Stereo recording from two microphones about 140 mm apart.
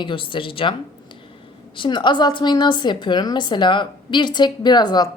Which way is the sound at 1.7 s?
35° left (ahead or behind).